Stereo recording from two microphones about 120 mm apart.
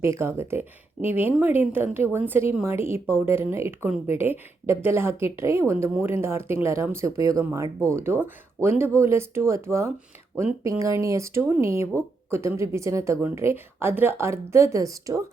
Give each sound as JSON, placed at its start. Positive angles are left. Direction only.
{"t": 0.0, "sound": "a woman's voice", "side_deg": -20}